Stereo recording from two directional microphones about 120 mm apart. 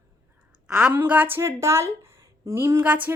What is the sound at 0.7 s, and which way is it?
A woman's voice, 15° right (ahead or behind).